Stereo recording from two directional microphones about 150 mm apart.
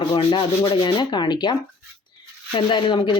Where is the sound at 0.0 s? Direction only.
35° left (ahead or behind).